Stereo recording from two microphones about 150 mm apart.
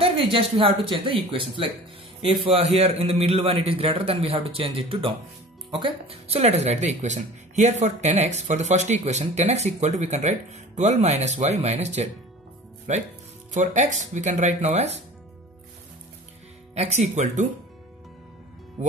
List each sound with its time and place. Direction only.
0.0 s a man's voice: 40° right (ahead or behind)
16.7 s speech: 45° right (ahead or behind)